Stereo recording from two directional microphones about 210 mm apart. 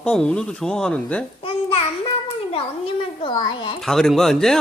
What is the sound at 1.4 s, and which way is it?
A child's voice, 25° left (ahead or behind).